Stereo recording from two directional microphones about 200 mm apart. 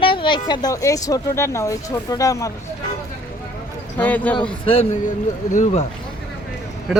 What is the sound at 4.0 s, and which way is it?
Speech, 10° left (ahead or behind).